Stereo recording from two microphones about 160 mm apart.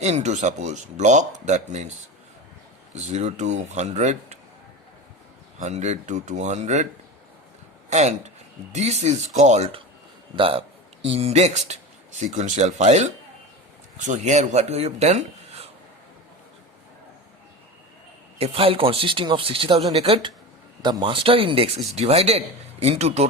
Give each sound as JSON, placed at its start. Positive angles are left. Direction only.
{"t": 0.0, "sound": "speech", "side_deg": -45}
{"t": 2.9, "sound": "speech", "side_deg": -45}
{"t": 5.5, "sound": "speech", "side_deg": -45}
{"t": 7.9, "sound": "speech", "side_deg": -45}
{"t": 18.3, "sound": "speech", "side_deg": -35}